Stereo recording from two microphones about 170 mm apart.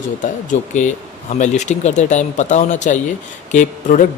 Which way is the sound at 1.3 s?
45° left (ahead or behind).